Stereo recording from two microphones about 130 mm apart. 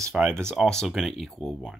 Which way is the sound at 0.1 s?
Centre (ahead or behind).